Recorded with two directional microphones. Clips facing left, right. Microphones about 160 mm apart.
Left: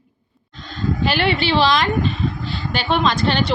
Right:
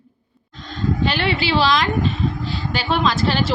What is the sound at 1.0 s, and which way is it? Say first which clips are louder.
A woman's voice: left 3 dB; centre (ahead or behind).